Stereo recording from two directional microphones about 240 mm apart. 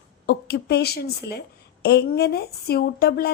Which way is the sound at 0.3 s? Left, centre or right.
Left.